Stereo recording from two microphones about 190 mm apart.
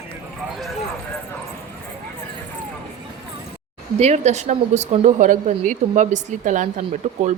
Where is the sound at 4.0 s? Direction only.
35° right (ahead or behind).